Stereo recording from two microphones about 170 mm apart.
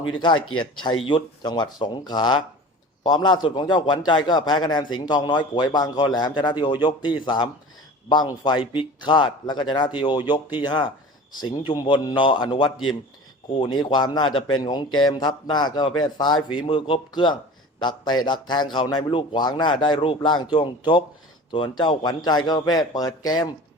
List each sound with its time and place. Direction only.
0.2 s a man's voice: 25° left (ahead or behind)